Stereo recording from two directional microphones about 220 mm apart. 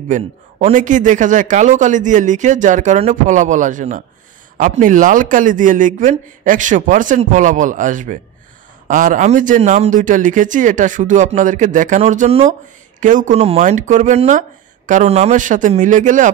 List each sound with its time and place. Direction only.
0.1 s a man's voice: 35° right (ahead or behind)